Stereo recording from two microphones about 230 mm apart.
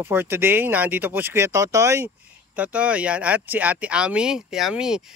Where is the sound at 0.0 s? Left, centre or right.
Centre.